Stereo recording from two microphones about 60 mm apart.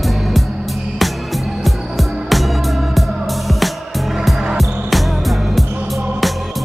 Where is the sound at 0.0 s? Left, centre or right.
Centre.